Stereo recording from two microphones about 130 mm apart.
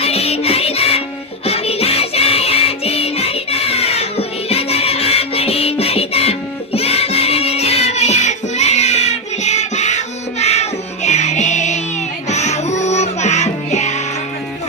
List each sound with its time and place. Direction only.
0.0 s music: 50° left (ahead or behind)